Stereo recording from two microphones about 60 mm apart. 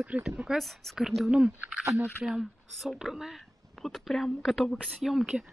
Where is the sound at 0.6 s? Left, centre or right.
Centre.